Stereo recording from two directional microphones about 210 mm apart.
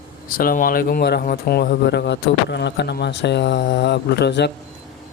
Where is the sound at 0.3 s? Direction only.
45° left (ahead or behind).